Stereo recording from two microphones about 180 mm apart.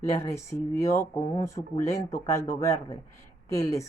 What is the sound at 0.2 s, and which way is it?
Speech, 15° left (ahead or behind).